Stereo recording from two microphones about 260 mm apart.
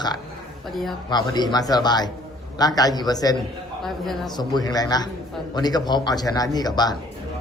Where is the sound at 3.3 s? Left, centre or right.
Centre.